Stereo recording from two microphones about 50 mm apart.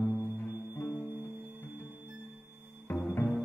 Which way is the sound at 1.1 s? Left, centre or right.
Right.